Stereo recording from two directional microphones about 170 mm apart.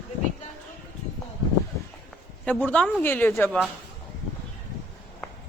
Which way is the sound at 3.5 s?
Centre (ahead or behind).